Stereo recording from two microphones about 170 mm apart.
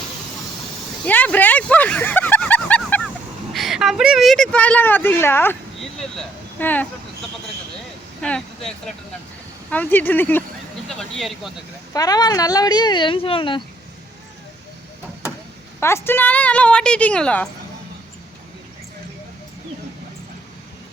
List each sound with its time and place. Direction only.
1.0 s vehicle: 10° left (ahead or behind)
3.5 s speech: centre (ahead or behind)
5.8 s speech: centre (ahead or behind)
8.2 s a woman's voice: 5° left (ahead or behind)
11.9 s speech: 20° left (ahead or behind)
15.8 s a woman's voice: 15° left (ahead or behind)